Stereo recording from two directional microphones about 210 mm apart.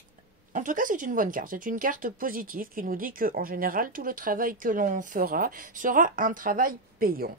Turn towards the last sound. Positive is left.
turn(degrees=-45)  # may be behind; listen again after turning